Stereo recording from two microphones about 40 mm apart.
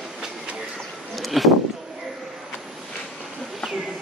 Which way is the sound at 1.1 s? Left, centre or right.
Centre.